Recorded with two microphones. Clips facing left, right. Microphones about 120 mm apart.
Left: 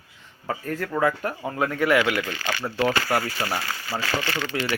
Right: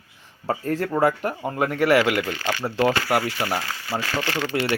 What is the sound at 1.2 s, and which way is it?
Speech, 10° right (ahead or behind).